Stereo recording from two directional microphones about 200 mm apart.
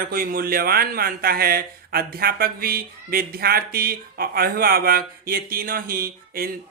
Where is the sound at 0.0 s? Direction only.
45° right (ahead or behind).